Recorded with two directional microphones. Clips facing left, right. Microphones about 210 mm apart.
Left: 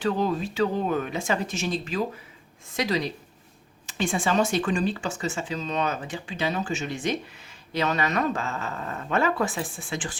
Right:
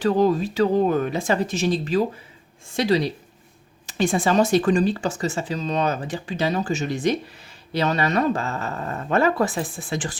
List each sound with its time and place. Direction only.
0.0 s speech: 40° right (ahead or behind)